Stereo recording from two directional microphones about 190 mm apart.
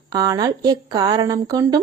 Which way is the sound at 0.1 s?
20° right (ahead or behind).